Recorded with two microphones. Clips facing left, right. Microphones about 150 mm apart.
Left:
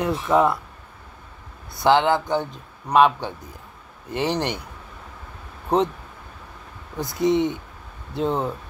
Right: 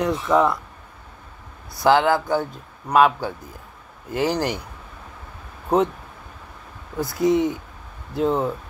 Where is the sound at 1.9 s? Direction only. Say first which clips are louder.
Even; 20° left (ahead or behind).